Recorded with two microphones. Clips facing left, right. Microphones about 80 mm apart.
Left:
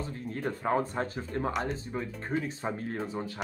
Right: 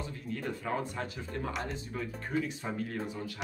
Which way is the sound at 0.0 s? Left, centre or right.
Left.